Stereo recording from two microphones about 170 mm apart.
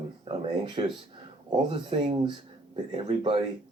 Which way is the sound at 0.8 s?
35° right (ahead or behind).